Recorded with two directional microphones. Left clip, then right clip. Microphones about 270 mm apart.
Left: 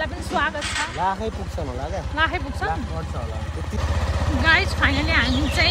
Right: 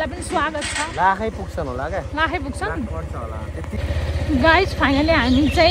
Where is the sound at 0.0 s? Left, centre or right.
Right.